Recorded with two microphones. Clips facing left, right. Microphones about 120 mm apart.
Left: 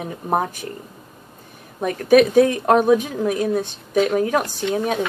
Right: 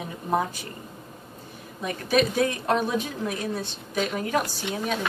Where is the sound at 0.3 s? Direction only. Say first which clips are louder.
Left 4 dB; 55° left (ahead or behind).